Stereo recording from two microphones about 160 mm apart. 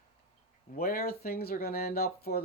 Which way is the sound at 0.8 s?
65° left (ahead or behind).